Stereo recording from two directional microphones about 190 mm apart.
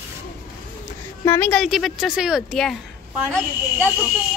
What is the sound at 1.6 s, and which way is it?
A woman's voice, centre (ahead or behind).